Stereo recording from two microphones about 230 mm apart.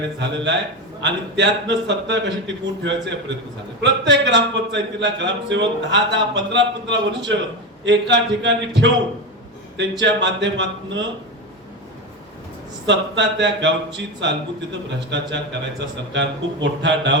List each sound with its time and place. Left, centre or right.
0.2 s speech: right
12.8 s speech: right